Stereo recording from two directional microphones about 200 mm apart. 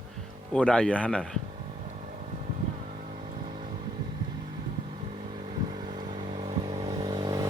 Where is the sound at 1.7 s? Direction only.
35° right (ahead or behind).